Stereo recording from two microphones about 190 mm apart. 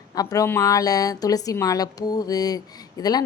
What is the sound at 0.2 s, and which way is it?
A woman's voice, 20° left (ahead or behind).